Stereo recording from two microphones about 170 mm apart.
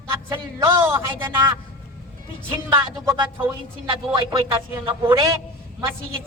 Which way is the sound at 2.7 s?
30° right (ahead or behind).